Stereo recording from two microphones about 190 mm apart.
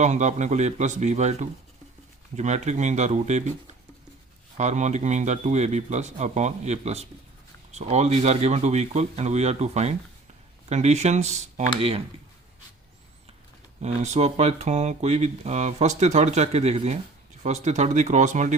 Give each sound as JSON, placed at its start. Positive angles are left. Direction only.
{"t": 0.0, "sound": "speech", "side_deg": -40}
{"t": 4.5, "sound": "speech", "side_deg": -40}
{"t": 13.8, "sound": "speech", "side_deg": -35}